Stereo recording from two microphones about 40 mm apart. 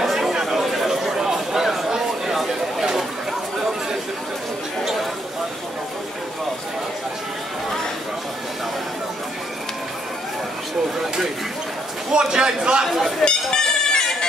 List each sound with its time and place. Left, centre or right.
0.0 s chatter: centre
12.1 s a man's voice: centre
12.8 s speech: centre
13.2 s goat: centre